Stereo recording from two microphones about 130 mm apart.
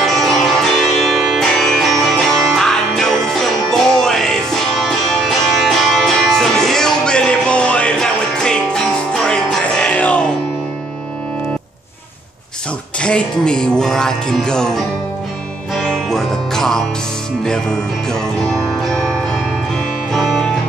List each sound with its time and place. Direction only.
0.1 s music: centre (ahead or behind)
13.0 s speech: 5° left (ahead or behind)
15.7 s music: 5° left (ahead or behind)